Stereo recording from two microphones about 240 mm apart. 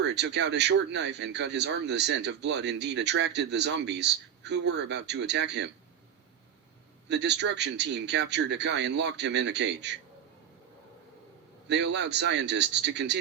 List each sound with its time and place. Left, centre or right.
0.0 s speech: right
7.1 s speech: right
11.7 s speech: right